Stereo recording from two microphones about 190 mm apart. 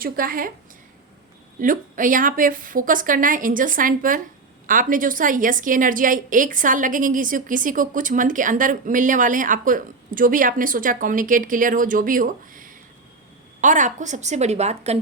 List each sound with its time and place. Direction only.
0.0 s a woman's voice: 50° right (ahead or behind)
1.5 s a woman's voice: 45° right (ahead or behind)